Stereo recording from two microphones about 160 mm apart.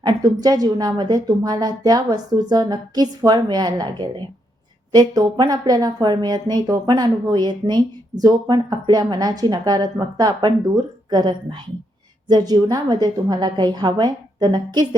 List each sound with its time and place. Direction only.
0.0 s speech: 25° right (ahead or behind)